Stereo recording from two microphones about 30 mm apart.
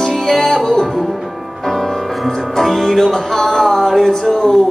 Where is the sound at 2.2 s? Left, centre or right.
Centre.